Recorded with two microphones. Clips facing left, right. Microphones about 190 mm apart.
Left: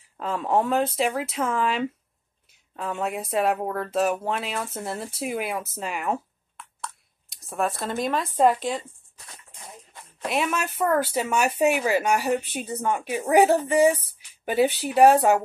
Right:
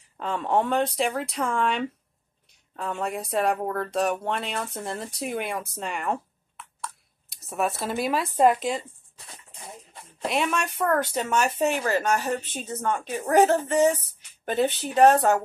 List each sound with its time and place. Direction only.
0.2 s speech: centre (ahead or behind)
9.2 s a sound: 30° right (ahead or behind)
10.2 s speech: centre (ahead or behind)